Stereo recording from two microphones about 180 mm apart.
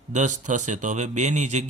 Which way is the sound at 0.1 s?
45° right (ahead or behind).